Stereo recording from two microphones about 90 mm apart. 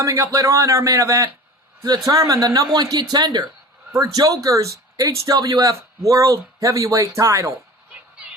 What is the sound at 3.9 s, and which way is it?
Speech, 40° right (ahead or behind).